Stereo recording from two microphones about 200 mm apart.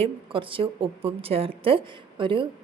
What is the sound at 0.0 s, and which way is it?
Speech, 25° right (ahead or behind).